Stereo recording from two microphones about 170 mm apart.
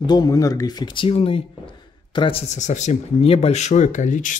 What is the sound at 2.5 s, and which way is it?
Speech, 45° left (ahead or behind).